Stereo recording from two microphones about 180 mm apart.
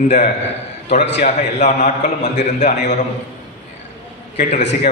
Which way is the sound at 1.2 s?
40° left (ahead or behind).